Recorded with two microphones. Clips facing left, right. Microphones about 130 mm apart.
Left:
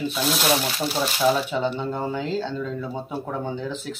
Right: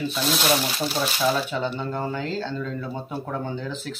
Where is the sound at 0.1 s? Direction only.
5° left (ahead or behind).